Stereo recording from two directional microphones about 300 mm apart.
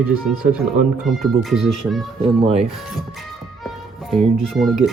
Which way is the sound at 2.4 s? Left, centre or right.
Centre.